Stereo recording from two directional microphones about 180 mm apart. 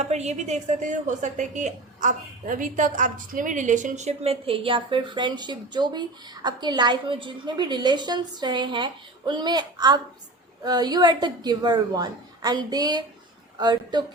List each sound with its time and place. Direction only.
0.0 s speech: 40° right (ahead or behind)